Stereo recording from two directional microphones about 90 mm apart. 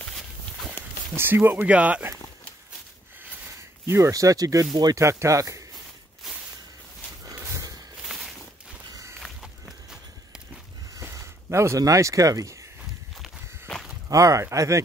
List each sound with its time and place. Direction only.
1.1 s speech: 25° right (ahead or behind)
3.8 s speech: 30° right (ahead or behind)
4.1 s speech: 40° right (ahead or behind)
7.3 s a sound: 25° right (ahead or behind)
9.2 s walk: centre (ahead or behind)
11.1 s speech: 30° right (ahead or behind)
14.0 s speech: 35° right (ahead or behind)